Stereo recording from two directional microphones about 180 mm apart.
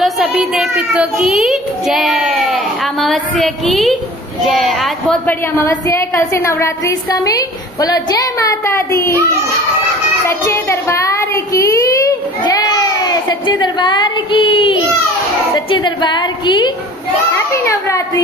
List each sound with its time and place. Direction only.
0.0 s child singing: 5° right (ahead or behind)
4.5 s a woman's voice: centre (ahead or behind); by 9.1 s 15° left (ahead or behind)
10.2 s child singing: 15° left (ahead or behind)
15.7 s a woman's voice: 25° left (ahead or behind)
17.5 s children playing: 15° left (ahead or behind)